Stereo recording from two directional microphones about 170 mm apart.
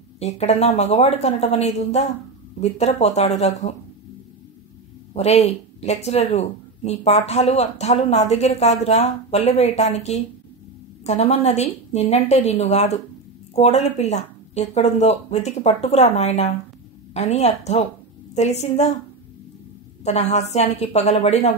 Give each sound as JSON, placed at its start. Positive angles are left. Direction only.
{"t": 0.2, "sound": "speech", "side_deg": 40}
{"t": 5.1, "sound": "speech", "side_deg": 40}
{"t": 20.1, "sound": "speech", "side_deg": 40}